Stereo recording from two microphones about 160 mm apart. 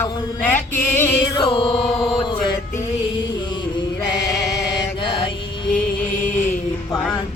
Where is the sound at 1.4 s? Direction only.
30° left (ahead or behind).